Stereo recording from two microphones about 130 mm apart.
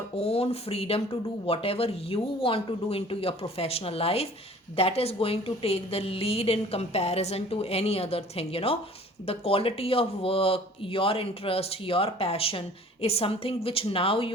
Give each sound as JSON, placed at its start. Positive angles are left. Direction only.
{"t": 0.2, "sound": "speech", "side_deg": 50}